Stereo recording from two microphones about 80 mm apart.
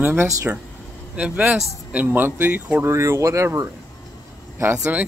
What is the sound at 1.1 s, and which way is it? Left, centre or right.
Speech, centre.